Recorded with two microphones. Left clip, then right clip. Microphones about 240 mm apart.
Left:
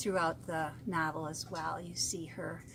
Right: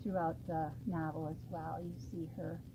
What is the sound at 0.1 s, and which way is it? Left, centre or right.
Speech, left.